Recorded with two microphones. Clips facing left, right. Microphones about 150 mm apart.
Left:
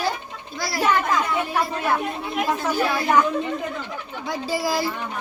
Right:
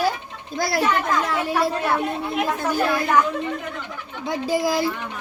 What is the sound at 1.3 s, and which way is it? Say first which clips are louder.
Speech: right 2 dB; 90° right.